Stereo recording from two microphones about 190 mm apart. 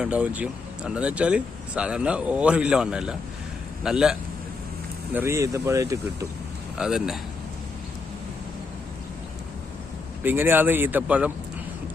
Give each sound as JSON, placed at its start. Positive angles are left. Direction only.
{"t": 0.0, "sound": "speech", "side_deg": -5}
{"t": 5.1, "sound": "speech", "side_deg": -15}
{"t": 6.7, "sound": "speech", "side_deg": -5}
{"t": 10.2, "sound": "speech", "side_deg": -10}